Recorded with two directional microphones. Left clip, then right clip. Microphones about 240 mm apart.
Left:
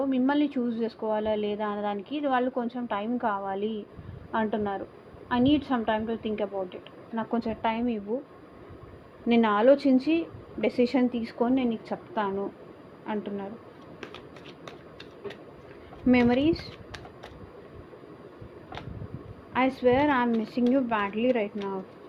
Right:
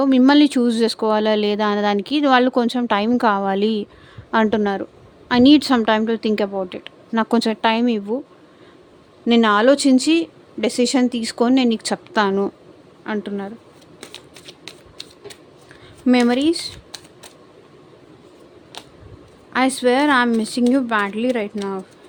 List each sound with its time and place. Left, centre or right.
0.0 s a woman's voice: right
9.2 s a woman's voice: right
16.0 s a woman's voice: right
19.5 s a woman's voice: right